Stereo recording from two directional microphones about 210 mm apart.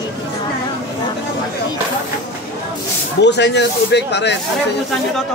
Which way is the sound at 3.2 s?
55° left (ahead or behind).